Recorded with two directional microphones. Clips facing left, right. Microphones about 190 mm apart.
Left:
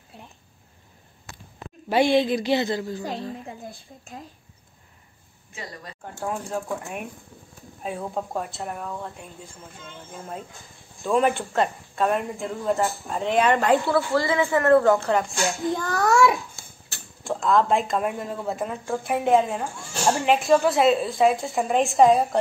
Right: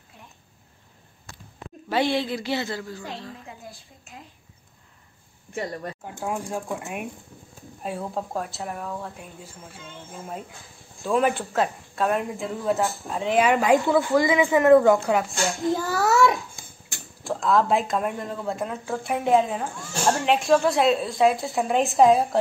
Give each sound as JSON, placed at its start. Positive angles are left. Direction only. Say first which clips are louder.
{"t": 1.9, "sound": "a woman's voice", "louder": "left 4 dB", "side_deg": 15}
{"t": 5.5, "sound": "speech", "louder": "right 8 dB", "side_deg": -55}
{"t": 6.2, "sound": "speech", "louder": "even", "side_deg": -10}
{"t": 16.6, "sound": "a sound", "louder": "right 1 dB", "side_deg": -15}
{"t": 17.2, "sound": "speech", "louder": "left 1 dB", "side_deg": 0}